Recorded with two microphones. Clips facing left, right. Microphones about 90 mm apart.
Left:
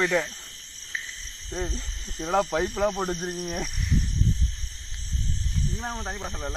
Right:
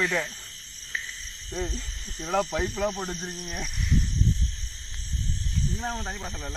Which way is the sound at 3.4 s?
45° left (ahead or behind).